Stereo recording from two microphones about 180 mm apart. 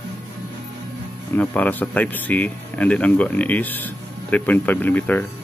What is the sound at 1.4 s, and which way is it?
Speech, 10° left (ahead or behind).